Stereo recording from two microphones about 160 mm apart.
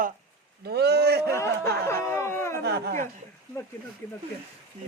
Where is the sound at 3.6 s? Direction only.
20° left (ahead or behind).